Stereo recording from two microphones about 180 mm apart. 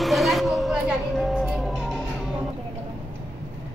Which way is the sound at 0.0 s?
Centre (ahead or behind).